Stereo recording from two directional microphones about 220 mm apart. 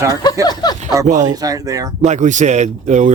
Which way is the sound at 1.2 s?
15° right (ahead or behind).